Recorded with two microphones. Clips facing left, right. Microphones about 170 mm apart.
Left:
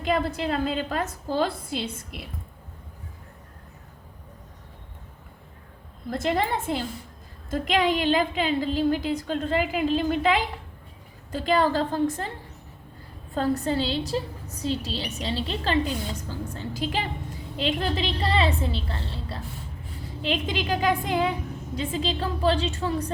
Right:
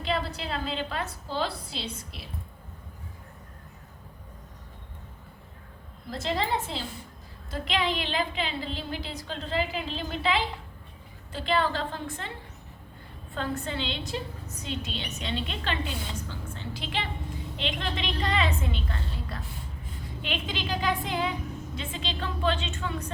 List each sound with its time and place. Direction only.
0.0 s a woman's voice: 50° left (ahead or behind)
6.1 s a woman's voice: 50° left (ahead or behind)
13.3 s a woman's voice: 40° left (ahead or behind)
20.2 s a woman's voice: 40° left (ahead or behind)